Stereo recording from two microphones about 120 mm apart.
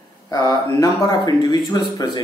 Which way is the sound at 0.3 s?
30° left (ahead or behind).